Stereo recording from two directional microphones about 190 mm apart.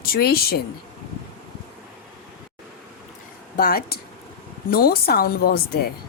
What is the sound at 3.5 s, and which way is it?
A woman's voice, 50° left (ahead or behind).